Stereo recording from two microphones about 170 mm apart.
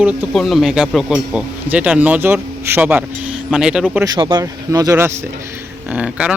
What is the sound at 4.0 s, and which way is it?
Speech, 25° right (ahead or behind).